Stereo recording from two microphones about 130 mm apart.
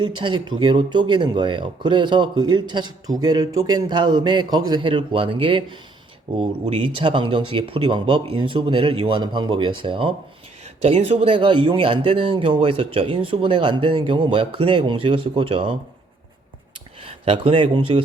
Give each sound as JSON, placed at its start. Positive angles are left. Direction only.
{"t": 0.0, "sound": "speech", "side_deg": -40}
{"t": 10.8, "sound": "speech", "side_deg": -50}
{"t": 17.0, "sound": "speech", "side_deg": -45}